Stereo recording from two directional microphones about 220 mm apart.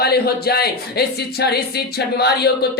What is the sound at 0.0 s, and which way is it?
Speech, 45° left (ahead or behind).